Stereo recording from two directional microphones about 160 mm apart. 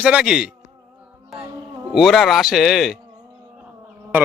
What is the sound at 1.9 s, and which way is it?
Speech, centre (ahead or behind).